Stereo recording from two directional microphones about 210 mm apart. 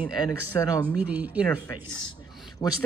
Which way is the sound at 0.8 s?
10° right (ahead or behind).